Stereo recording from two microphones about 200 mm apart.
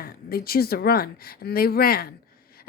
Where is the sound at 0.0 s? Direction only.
50° left (ahead or behind).